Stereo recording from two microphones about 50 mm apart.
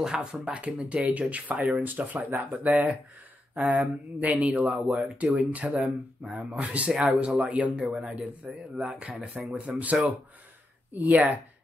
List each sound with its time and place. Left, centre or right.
0.0 s speech: centre
10.9 s speech: right